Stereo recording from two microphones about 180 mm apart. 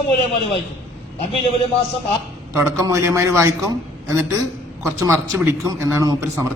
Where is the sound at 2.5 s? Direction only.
15° right (ahead or behind).